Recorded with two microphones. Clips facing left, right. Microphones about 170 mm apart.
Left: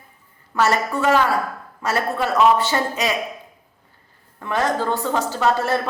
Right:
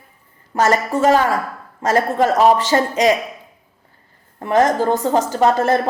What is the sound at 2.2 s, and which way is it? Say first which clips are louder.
Speech: right 3 dB; 40° right (ahead or behind).